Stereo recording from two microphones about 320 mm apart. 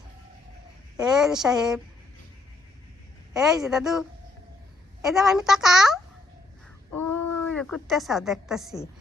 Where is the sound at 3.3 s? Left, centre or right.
Centre.